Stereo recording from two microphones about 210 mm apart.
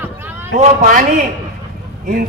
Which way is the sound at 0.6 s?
40° right (ahead or behind).